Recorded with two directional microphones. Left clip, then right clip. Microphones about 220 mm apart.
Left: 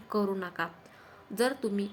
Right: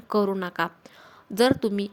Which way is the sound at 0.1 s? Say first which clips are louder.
Right 7 dB; 40° right (ahead or behind).